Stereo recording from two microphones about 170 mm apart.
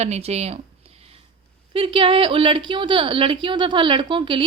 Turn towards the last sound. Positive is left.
turn(degrees=-30)  # may be behind; listen again after turning